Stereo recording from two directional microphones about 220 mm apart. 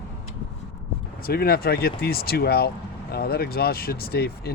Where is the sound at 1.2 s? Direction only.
45° left (ahead or behind).